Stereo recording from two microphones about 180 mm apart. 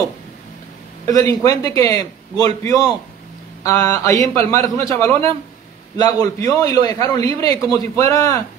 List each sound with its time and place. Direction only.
1.1 s a man's voice: 20° left (ahead or behind)